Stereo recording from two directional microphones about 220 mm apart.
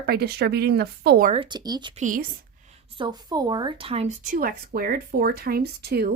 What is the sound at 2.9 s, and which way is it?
Speech, 20° right (ahead or behind).